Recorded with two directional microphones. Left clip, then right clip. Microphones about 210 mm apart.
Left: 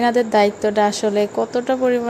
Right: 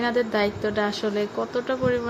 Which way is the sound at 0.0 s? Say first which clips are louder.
Left 8 dB; 20° left (ahead or behind).